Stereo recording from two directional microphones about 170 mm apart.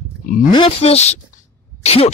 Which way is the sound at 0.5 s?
35° left (ahead or behind).